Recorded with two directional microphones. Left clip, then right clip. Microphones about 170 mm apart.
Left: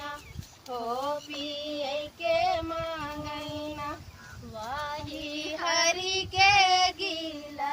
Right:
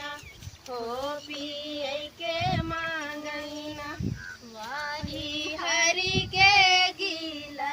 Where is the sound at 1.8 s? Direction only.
5° left (ahead or behind).